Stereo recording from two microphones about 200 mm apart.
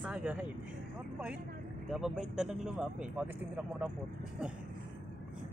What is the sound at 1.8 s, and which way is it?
Speech, centre (ahead or behind).